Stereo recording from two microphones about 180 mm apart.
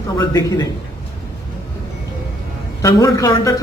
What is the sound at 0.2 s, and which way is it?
Speech, 20° left (ahead or behind).